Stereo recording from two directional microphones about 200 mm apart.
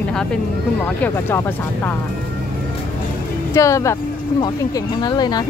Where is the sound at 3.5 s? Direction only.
15° left (ahead or behind).